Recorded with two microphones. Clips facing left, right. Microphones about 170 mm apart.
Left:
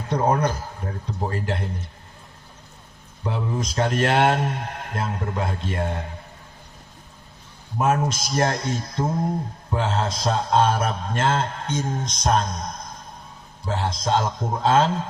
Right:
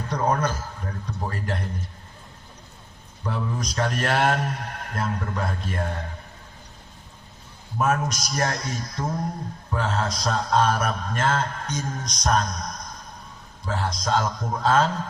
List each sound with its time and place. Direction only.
0.1 s a man's voice: 30° left (ahead or behind)
3.2 s a man's voice: 25° left (ahead or behind)
7.8 s a man's voice: 30° left (ahead or behind)